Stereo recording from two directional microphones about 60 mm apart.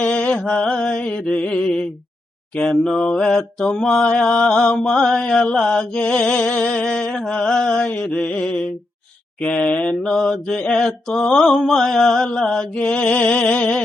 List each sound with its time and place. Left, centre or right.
0.0 s mantra: centre
9.4 s speech: left
9.8 s mantra: centre